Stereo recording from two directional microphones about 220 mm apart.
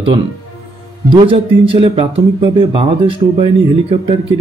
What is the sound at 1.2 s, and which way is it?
Speech, 25° right (ahead or behind).